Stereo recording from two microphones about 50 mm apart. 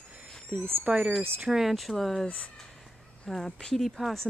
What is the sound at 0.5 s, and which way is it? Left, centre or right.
Speech, right.